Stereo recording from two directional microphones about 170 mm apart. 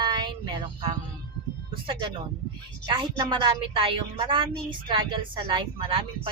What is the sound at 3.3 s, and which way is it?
A woman's voice, 30° right (ahead or behind).